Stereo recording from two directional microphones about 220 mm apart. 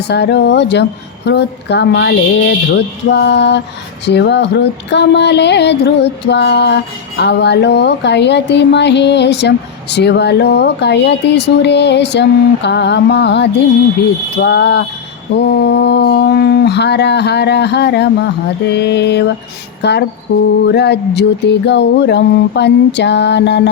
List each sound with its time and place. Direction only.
0.1 s speech: 50° left (ahead or behind)